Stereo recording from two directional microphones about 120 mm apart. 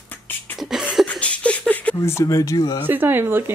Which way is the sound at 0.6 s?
5° right (ahead or behind).